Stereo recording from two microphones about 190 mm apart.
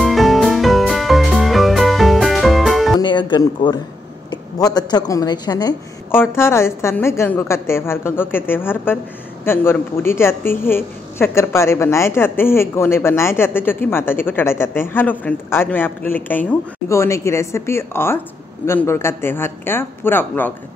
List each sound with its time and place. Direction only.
0.0 s music: centre (ahead or behind)
3.0 s a woman's voice: 25° left (ahead or behind)